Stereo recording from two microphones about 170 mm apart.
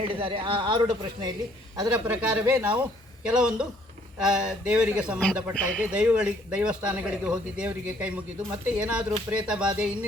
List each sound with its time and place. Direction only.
0.0 s speech: 30° right (ahead or behind)
1.8 s speech: 15° right (ahead or behind)
5.2 s speech: 5° left (ahead or behind)
5.8 s speech: 10° right (ahead or behind)